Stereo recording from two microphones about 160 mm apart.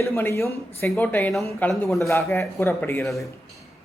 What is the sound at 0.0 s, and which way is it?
A man's voice, 15° left (ahead or behind).